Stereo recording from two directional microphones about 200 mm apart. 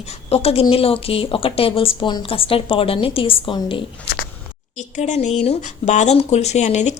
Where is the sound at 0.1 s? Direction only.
30° left (ahead or behind).